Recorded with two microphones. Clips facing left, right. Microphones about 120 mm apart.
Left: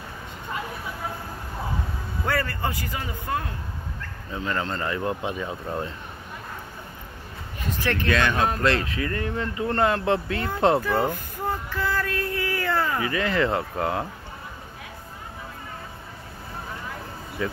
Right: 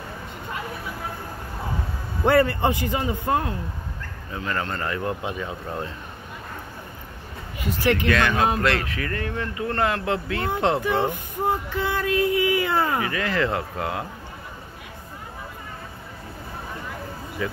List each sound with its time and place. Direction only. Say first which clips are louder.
2.2 s speech: right 8 dB; 25° right (ahead or behind)
4.5 s speech: even; 25° left (ahead or behind)
7.6 s speech: right 4 dB; 10° right (ahead or behind)
8.6 s speech: left 1 dB; 25° left (ahead or behind)
10.4 s speech: even; 20° right (ahead or behind)
13.1 s speech: left 1 dB; 25° left (ahead or behind)